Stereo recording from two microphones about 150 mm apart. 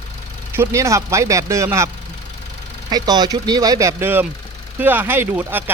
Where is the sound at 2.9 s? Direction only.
25° right (ahead or behind).